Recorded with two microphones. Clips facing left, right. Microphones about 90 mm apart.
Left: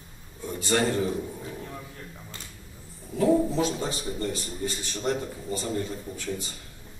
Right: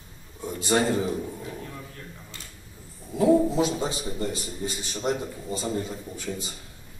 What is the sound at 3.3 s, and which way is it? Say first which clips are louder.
A man's voice: right 4 dB; 15° right (ahead or behind).